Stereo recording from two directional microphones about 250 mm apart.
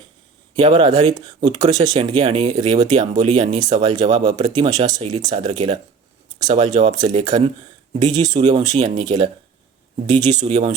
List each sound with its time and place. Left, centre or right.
0.5 s speech: right
8.4 s speech: right
10.3 s speech: right